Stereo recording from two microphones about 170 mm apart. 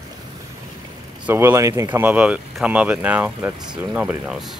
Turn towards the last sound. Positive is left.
turn(degrees=-5)  # may be behind; listen again after turning